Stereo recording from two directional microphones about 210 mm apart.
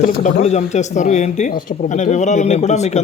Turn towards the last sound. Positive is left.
turn(degrees=30)  # may be behind; listen again after turning